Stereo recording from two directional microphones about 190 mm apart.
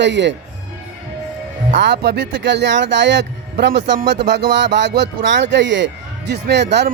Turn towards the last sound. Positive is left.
turn(degrees=-65)  # may be behind; listen again after turning